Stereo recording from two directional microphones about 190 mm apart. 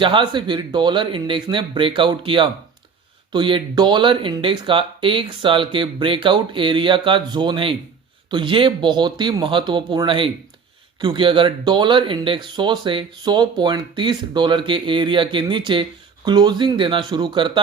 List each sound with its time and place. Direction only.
0.0 s speech: 25° right (ahead or behind)